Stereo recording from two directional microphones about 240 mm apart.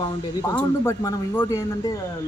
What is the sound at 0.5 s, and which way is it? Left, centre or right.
A man's voice, centre.